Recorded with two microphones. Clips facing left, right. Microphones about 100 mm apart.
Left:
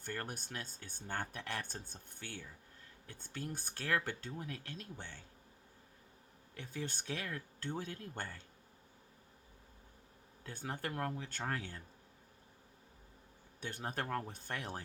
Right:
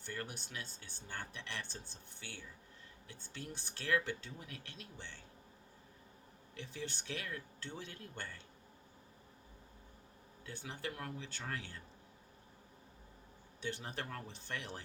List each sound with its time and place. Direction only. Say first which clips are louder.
0.0 s speech: left 2 dB; 50° left (ahead or behind)
6.5 s speech: left 2 dB; 45° left (ahead or behind)
10.4 s speech: left 2 dB; 45° left (ahead or behind)
13.6 s speech: left 2 dB; 45° left (ahead or behind)